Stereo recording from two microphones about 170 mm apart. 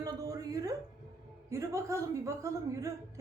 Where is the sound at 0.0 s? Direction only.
20° right (ahead or behind).